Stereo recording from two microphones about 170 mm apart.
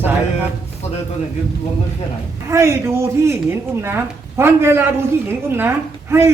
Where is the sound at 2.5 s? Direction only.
15° right (ahead or behind).